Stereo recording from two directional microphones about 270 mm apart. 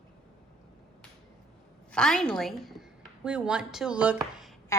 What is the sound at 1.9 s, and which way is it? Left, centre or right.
A woman's voice, centre.